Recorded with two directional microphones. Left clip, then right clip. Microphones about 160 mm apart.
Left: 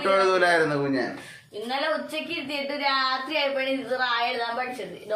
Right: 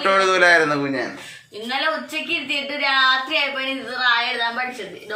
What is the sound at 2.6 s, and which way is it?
Speech, 30° left (ahead or behind).